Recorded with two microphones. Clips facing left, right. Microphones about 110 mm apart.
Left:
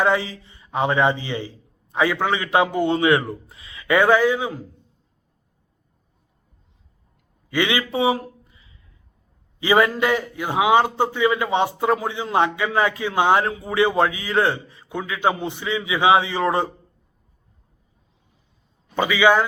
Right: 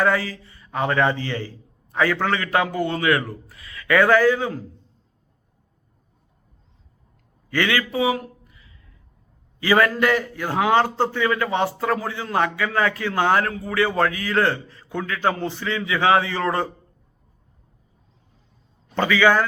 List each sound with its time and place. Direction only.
0.0 s a man's voice: 20° left (ahead or behind)
7.5 s a man's voice: 20° left (ahead or behind)
7.9 s a sound: 30° left (ahead or behind)
9.6 s a man's voice: 20° left (ahead or behind)
18.9 s a man's voice: 15° left (ahead or behind)